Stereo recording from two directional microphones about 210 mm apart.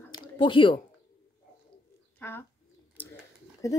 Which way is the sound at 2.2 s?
10° left (ahead or behind).